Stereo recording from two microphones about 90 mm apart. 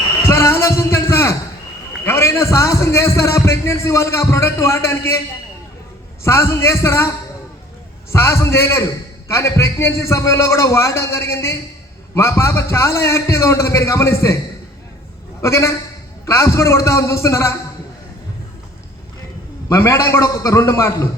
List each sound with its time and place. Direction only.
0.3 s a sound: 35° left (ahead or behind)
2.0 s a man's voice: 30° left (ahead or behind)
6.2 s a man's voice: 30° left (ahead or behind)
8.1 s a man's voice: 30° left (ahead or behind)
15.4 s a man's voice: 35° left (ahead or behind)
19.6 s a man's voice: 30° left (ahead or behind)